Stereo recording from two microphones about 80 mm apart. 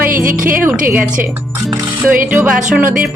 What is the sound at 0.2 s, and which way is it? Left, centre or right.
Speech, right.